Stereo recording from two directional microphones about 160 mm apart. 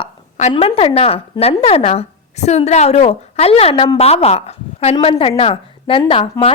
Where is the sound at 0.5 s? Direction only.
35° left (ahead or behind).